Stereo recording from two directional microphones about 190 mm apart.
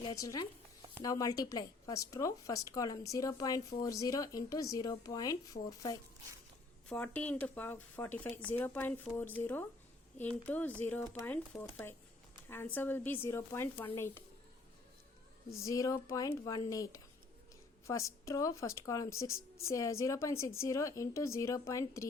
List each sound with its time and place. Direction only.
0.2 s a woman's voice: 20° left (ahead or behind)
6.8 s speech: 10° left (ahead or behind)
15.6 s speech: 15° left (ahead or behind)